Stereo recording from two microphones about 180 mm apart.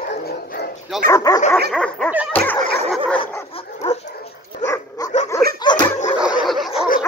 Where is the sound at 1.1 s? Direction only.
20° left (ahead or behind).